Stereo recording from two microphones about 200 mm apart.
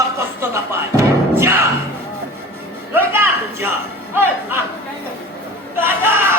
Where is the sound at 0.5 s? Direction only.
15° right (ahead or behind).